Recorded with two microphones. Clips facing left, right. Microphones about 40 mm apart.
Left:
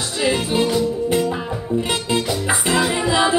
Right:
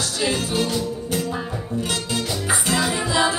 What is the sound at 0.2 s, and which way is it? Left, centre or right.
Music, left.